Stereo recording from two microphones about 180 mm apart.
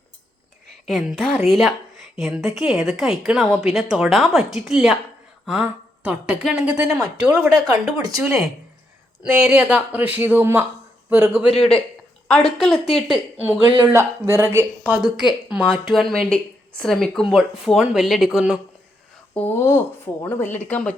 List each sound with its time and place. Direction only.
0.9 s a woman's voice: centre (ahead or behind)
13.8 s a woman's voice: 15° right (ahead or behind)
19.3 s speech: 10° left (ahead or behind)